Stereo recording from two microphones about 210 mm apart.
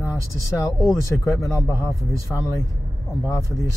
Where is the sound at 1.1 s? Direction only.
15° left (ahead or behind).